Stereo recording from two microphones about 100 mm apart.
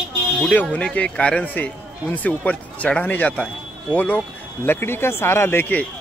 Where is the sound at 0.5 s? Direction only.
15° left (ahead or behind).